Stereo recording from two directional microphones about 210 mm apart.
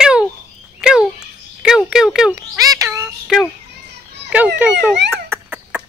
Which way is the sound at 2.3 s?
15° right (ahead or behind).